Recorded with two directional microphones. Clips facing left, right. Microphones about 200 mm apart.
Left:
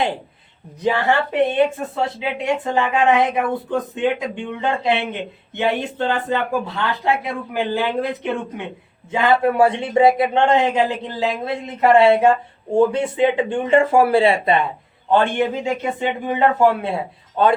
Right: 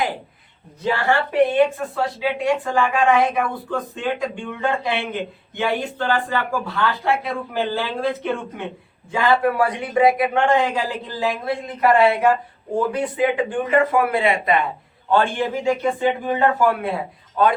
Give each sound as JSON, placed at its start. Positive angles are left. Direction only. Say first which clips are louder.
{"t": 0.8, "sound": "a man's voice", "louder": "left 2 dB", "side_deg": 20}